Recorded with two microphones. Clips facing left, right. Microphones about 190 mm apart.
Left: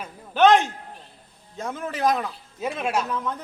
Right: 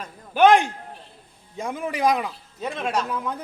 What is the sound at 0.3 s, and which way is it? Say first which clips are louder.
A man's voice: right 1 dB; 10° right (ahead or behind).